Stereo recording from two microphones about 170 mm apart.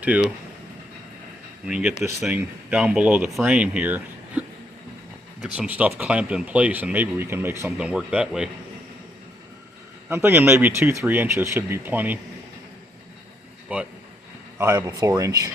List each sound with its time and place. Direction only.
0.0 s speech: 10° right (ahead or behind)
1.6 s speech: 5° right (ahead or behind)
10.1 s speech: 10° right (ahead or behind)
13.7 s speech: 10° right (ahead or behind)
14.8 s speech: 25° right (ahead or behind)